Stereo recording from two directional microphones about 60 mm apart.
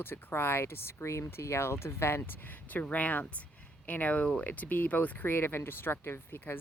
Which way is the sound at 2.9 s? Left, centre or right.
Left.